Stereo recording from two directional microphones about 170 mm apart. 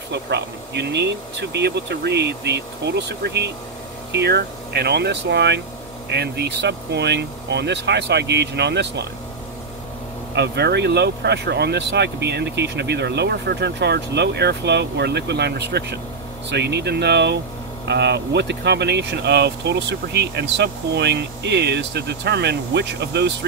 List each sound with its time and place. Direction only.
0.1 s speech: 90° right
10.3 s speech: 85° right